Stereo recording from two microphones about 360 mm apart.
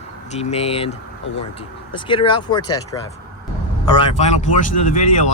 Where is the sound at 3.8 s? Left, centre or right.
Centre.